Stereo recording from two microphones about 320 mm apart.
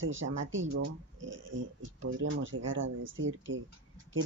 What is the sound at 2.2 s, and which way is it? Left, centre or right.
Speech, right.